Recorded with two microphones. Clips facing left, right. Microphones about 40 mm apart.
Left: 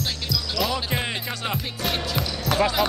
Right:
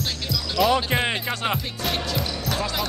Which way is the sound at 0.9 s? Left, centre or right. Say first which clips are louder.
Right 4 dB; centre.